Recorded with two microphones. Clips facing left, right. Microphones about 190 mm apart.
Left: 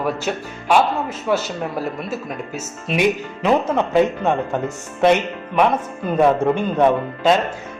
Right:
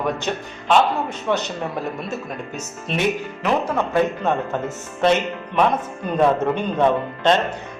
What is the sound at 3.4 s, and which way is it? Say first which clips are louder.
A man's voice: left 4 dB; 20° left (ahead or behind).